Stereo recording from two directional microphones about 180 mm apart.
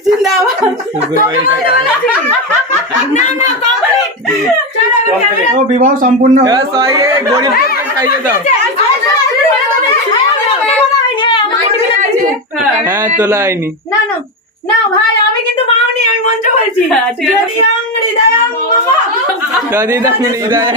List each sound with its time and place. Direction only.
3.2 s a child's voice: 40° left (ahead or behind)
5.8 s speech: 50° right (ahead or behind)
6.4 s speech: 20° right (ahead or behind)
11.2 s a sound: 30° left (ahead or behind)
13.1 s speech: 15° right (ahead or behind)
19.7 s speech: 15° right (ahead or behind)